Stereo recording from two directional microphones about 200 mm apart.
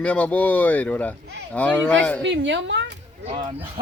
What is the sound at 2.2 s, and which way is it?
Speech, 65° right (ahead or behind).